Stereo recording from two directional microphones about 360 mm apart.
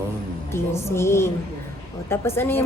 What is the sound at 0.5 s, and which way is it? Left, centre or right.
A woman's voice, centre.